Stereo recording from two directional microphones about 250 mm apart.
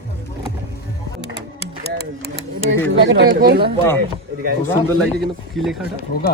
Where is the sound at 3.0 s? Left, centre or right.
Right.